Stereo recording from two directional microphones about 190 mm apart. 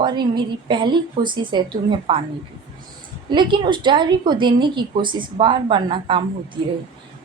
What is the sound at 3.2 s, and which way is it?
A woman's voice, 25° right (ahead or behind).